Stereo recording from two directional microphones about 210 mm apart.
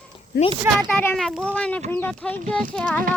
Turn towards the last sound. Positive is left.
turn(degrees=5)  # may be behind; listen again after turning